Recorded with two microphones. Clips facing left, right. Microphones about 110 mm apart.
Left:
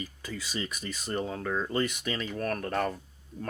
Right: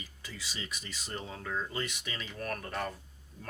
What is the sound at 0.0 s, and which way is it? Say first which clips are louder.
Speech: left 8 dB; 45° left (ahead or behind).